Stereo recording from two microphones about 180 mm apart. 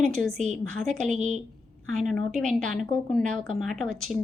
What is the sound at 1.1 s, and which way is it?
Speech, 40° right (ahead or behind).